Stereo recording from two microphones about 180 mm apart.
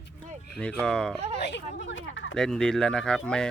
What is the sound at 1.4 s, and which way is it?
Speech, 75° left (ahead or behind).